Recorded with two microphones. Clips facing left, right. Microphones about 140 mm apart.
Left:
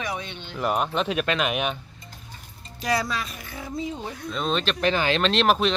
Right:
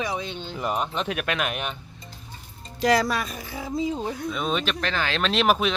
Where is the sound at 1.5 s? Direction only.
10° left (ahead or behind).